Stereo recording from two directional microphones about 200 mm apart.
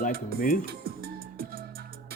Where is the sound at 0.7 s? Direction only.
50° right (ahead or behind).